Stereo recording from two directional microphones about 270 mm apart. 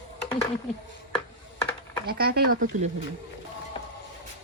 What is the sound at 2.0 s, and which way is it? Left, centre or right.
Speech, right.